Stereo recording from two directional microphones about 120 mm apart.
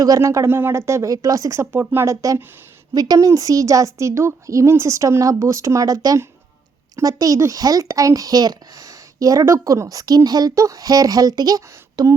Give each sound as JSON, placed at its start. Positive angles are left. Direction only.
{"t": 0.0, "sound": "a woman's voice", "side_deg": -30}